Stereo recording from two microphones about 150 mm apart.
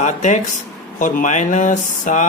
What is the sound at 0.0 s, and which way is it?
Speech, 55° left (ahead or behind).